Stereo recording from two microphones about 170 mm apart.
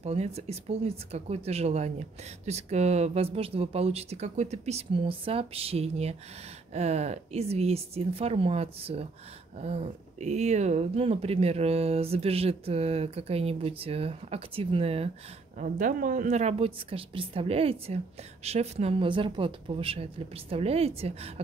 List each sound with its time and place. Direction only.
0.0 s speech: 40° right (ahead or behind)
15.6 s speech: 50° right (ahead or behind)